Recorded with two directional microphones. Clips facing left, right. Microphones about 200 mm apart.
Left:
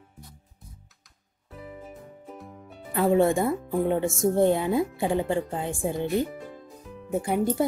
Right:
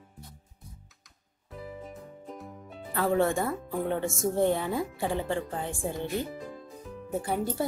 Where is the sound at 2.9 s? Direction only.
15° left (ahead or behind).